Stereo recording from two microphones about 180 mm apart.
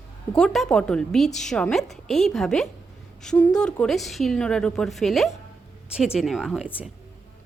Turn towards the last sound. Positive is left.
turn(degrees=0)  # may be behind; listen again after turning